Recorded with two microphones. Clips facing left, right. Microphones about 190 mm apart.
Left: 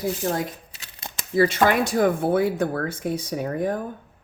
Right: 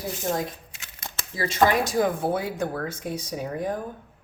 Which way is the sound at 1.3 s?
60° left (ahead or behind).